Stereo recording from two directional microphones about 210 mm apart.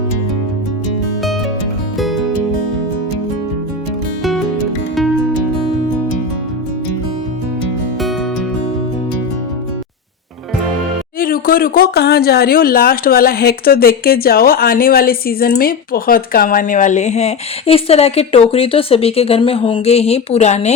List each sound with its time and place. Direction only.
2.0 s music: centre (ahead or behind)
4.2 s music: centre (ahead or behind)
11.2 s speech: 45° left (ahead or behind)